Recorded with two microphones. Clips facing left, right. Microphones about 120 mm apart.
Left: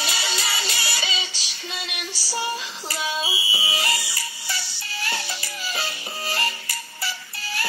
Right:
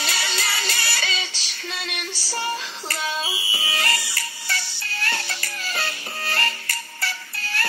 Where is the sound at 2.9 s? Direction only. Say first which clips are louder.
Even; 10° left (ahead or behind).